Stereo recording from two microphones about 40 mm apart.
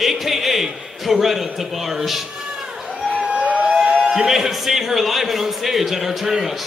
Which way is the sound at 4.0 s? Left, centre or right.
Centre.